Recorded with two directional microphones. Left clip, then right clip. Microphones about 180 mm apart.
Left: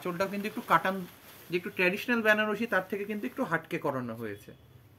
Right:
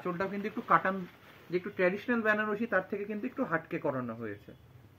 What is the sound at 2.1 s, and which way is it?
Speech, 70° left (ahead or behind).